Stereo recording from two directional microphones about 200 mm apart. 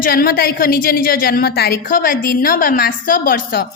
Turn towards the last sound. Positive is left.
turn(degrees=45)  # may be behind; listen again after turning